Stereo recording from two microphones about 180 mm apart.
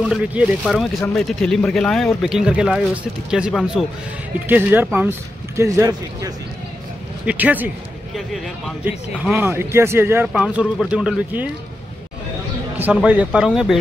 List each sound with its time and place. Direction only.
0.1 s speech: 5° right (ahead or behind)
1.0 s a man's voice: 5° left (ahead or behind)
12.7 s a man's voice: 10° right (ahead or behind)